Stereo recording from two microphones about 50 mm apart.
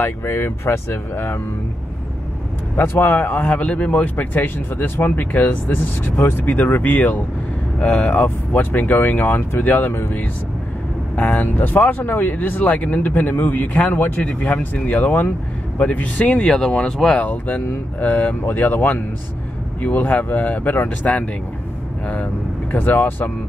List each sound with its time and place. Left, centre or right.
0.2 s speech: left
1.1 s speech: left
2.7 s speech: left
11.1 s speech: left
16.3 s speech: centre
17.1 s speech: left